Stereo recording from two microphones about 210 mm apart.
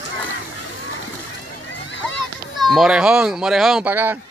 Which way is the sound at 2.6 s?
Centre (ahead or behind).